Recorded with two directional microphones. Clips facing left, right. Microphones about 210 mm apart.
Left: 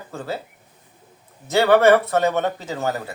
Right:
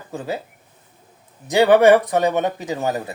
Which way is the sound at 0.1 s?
15° right (ahead or behind).